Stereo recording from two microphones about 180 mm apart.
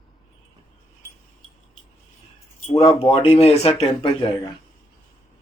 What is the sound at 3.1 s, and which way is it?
Speech, 35° left (ahead or behind).